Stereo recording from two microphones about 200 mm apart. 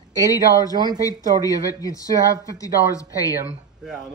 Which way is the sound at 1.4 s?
15° left (ahead or behind).